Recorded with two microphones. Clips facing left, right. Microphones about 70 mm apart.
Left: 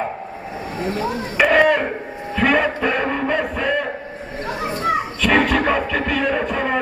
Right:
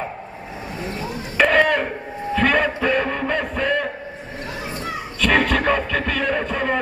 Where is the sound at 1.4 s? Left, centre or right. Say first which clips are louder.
Left 2 dB; centre.